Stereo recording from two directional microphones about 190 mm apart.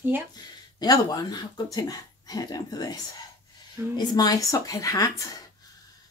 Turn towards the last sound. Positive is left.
turn(degrees=20)  # may be behind; listen again after turning